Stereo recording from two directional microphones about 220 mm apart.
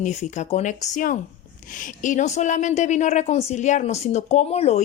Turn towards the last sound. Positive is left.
turn(degrees=30)  # may be behind; listen again after turning